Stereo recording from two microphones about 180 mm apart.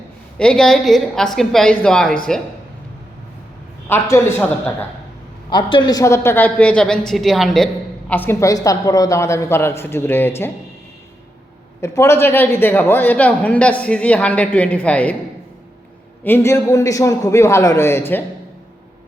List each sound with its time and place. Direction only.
0.3 s a woman's voice: 5° left (ahead or behind)
3.8 s a woman's voice: 15° left (ahead or behind)
5.5 s a woman's voice: 25° left (ahead or behind)
11.8 s a woman's voice: 15° left (ahead or behind)
16.2 s a woman's voice: 10° left (ahead or behind)